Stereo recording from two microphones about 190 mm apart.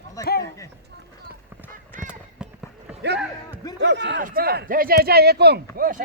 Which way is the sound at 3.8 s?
65° right (ahead or behind).